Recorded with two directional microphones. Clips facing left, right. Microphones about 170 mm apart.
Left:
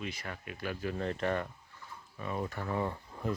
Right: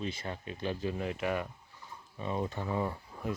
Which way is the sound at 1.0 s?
10° right (ahead or behind).